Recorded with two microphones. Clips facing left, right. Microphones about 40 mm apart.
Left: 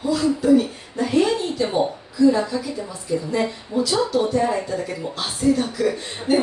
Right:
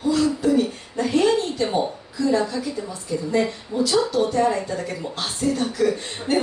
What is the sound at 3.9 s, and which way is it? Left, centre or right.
Speech, centre.